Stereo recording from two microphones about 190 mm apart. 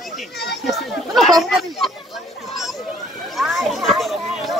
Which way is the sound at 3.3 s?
Centre (ahead or behind).